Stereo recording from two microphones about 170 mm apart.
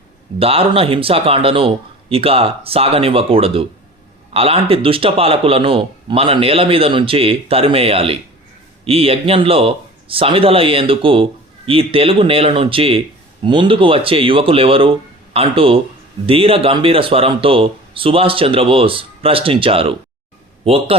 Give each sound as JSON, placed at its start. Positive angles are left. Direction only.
{"t": 0.3, "sound": "speech", "side_deg": -35}